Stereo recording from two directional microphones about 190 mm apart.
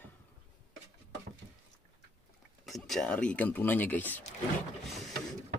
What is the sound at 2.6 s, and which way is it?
Speech, centre (ahead or behind).